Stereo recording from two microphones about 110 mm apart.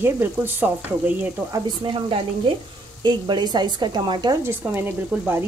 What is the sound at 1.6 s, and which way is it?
Speech, 50° right (ahead or behind).